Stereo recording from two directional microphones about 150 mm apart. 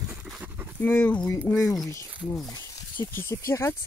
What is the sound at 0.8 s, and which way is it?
Speech, 10° left (ahead or behind).